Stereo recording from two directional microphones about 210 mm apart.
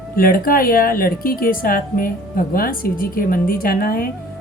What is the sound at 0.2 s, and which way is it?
A woman's voice, 40° left (ahead or behind).